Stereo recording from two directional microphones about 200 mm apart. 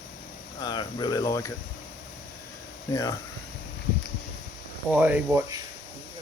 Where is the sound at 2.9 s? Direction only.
15° left (ahead or behind).